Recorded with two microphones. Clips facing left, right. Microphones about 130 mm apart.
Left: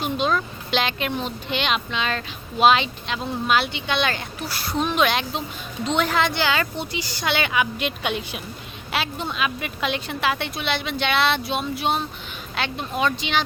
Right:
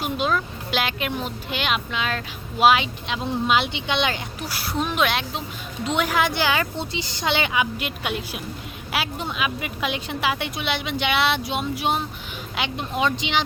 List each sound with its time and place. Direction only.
0.0 s speech: 5° right (ahead or behind)